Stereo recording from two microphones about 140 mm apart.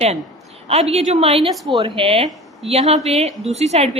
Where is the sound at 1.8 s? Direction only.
40° right (ahead or behind).